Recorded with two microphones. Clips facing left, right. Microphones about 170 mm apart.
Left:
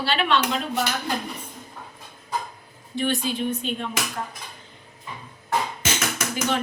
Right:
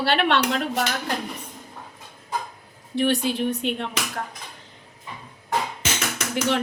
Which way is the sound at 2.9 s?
65° right (ahead or behind).